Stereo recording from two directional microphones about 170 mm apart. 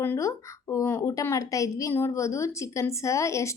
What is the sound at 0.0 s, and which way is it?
A woman's voice, 15° left (ahead or behind).